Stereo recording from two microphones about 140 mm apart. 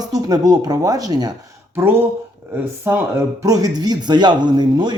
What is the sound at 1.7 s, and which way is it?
Speech, 15° right (ahead or behind).